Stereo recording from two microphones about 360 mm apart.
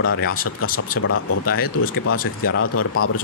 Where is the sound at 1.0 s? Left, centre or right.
Left.